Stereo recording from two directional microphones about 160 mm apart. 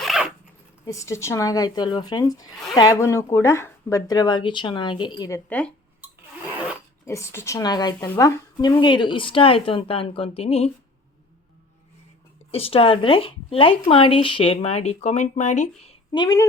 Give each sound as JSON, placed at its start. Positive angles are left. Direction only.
{"t": 0.0, "sound": "zipper", "side_deg": 0}
{"t": 0.9, "sound": "speech", "side_deg": 20}
{"t": 5.5, "sound": "speech", "side_deg": 10}
{"t": 7.0, "sound": "speech", "side_deg": 20}
{"t": 8.0, "sound": "speech", "side_deg": 10}
{"t": 8.6, "sound": "speech", "side_deg": 25}
{"t": 12.5, "sound": "speech", "side_deg": 35}
{"t": 16.1, "sound": "speech", "side_deg": 25}